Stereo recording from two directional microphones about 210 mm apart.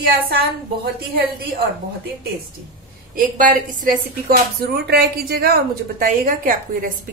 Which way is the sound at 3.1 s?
40° right (ahead or behind).